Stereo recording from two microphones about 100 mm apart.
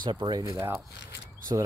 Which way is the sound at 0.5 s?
25° right (ahead or behind).